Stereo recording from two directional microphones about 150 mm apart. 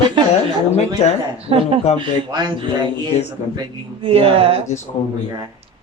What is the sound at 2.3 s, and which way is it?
Speech, 30° right (ahead or behind).